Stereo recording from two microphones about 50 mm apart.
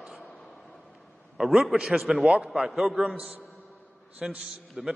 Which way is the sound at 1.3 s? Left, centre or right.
Centre.